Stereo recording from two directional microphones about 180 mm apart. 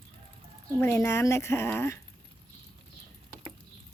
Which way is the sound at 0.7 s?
15° left (ahead or behind).